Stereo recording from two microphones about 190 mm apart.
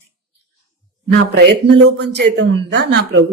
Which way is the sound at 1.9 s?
65° right (ahead or behind).